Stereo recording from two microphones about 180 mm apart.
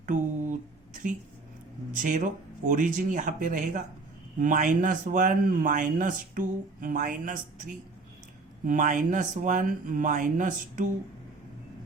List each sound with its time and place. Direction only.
0.0 s a sound: 45° right (ahead or behind)
1.9 s speech: 45° right (ahead or behind)
8.6 s speech: 45° right (ahead or behind)